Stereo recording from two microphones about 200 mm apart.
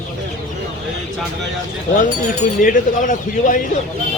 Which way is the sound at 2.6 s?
40° left (ahead or behind).